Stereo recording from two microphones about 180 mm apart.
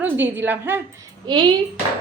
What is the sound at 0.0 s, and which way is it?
Speech, 10° right (ahead or behind).